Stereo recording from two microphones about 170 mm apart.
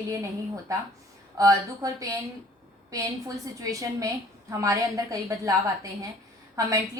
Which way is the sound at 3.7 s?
20° right (ahead or behind).